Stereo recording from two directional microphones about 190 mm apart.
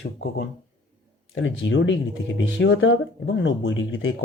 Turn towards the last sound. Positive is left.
turn(degrees=85)